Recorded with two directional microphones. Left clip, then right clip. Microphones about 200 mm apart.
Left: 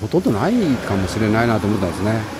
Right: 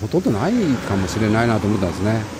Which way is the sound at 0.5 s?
40° right (ahead or behind).